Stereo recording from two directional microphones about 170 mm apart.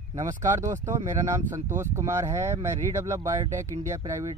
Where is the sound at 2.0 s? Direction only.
15° right (ahead or behind).